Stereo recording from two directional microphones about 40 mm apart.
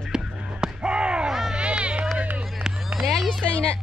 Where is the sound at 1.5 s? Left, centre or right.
Right.